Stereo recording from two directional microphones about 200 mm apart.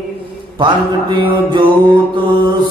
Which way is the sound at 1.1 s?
20° right (ahead or behind).